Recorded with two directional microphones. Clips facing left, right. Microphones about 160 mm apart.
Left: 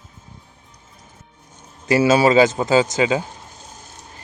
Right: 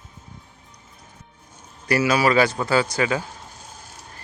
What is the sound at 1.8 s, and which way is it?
Speech, 25° left (ahead or behind).